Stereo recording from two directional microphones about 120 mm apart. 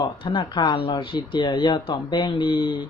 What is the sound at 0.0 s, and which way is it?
Speech, 45° left (ahead or behind).